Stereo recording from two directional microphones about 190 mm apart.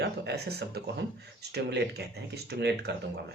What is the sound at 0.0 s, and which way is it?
Speech, 60° right (ahead or behind).